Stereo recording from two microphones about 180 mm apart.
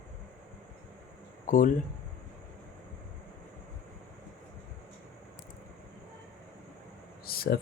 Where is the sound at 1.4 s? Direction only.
50° left (ahead or behind).